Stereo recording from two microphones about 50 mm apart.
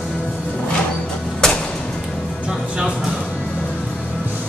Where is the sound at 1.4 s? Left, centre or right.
Centre.